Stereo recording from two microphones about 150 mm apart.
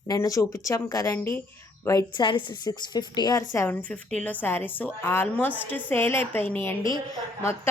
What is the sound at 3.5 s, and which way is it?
A woman's voice, 15° left (ahead or behind).